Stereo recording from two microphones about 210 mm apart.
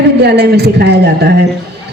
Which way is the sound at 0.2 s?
50° right (ahead or behind).